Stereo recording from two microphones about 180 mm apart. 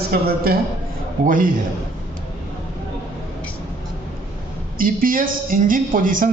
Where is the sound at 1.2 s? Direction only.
45° right (ahead or behind).